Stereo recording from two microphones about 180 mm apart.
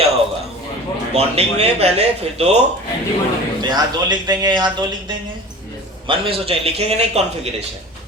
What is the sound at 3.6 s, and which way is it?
A man's voice, 25° right (ahead or behind).